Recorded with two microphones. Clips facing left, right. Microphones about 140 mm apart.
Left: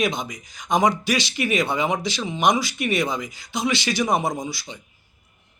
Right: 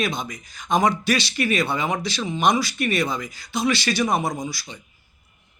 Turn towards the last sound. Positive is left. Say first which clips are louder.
# left 1 dB
turn(degrees=20)  # may be behind; listen again after turning